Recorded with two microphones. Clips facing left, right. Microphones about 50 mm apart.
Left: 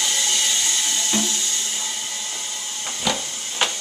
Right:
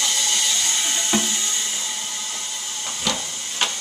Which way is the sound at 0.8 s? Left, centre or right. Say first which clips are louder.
Right 1 dB; right.